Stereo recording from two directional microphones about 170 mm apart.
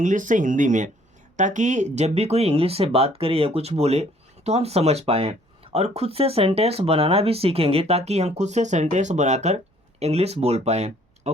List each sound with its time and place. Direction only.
0.0 s speech: 50° right (ahead or behind)